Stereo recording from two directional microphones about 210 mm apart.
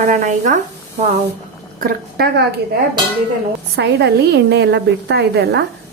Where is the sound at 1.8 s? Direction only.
50° right (ahead or behind).